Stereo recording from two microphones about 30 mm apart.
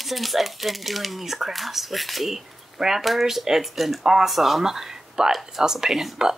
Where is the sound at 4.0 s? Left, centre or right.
Centre.